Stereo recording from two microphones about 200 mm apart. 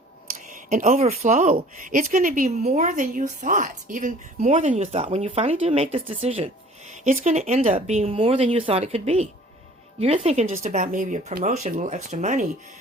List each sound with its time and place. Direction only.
0.5 s a woman's voice: 40° right (ahead or behind)